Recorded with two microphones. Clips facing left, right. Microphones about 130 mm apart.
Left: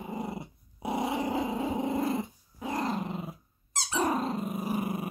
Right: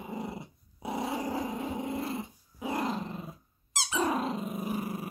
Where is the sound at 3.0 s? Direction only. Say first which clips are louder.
Left 3 dB; 20° left (ahead or behind).